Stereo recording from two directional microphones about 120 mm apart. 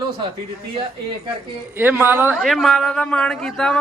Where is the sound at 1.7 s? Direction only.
15° right (ahead or behind).